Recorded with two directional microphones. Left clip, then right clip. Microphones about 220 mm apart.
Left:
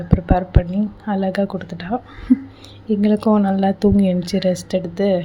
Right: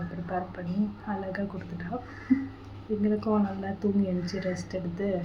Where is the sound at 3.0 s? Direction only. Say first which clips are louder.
Left 11 dB; 40° left (ahead or behind).